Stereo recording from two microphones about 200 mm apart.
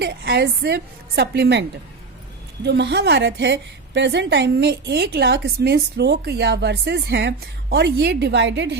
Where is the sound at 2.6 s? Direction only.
60° right (ahead or behind).